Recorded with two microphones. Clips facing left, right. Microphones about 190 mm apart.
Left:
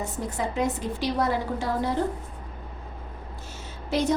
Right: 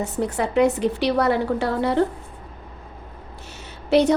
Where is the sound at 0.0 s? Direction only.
70° right (ahead or behind).